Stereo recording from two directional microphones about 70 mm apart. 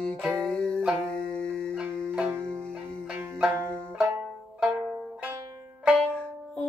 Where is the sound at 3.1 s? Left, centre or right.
Right.